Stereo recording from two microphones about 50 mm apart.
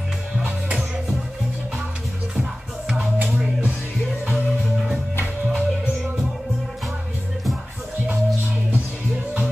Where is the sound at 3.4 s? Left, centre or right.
Right.